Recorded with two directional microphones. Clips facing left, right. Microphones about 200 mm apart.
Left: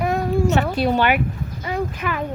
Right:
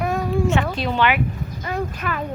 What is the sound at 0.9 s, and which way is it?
Speech, 45° left (ahead or behind).